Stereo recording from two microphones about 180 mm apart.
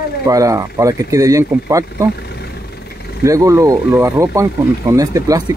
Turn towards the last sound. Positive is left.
turn(degrees=-20)  # may be behind; listen again after turning